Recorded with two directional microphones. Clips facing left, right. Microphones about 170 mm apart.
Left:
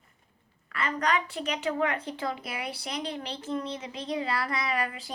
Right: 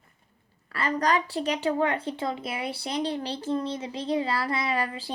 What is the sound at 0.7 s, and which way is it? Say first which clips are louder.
A woman's voice: right 3 dB; 35° right (ahead or behind).